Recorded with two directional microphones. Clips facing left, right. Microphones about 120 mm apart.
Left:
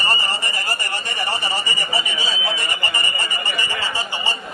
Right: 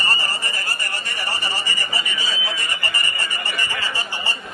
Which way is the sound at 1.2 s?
20° left (ahead or behind).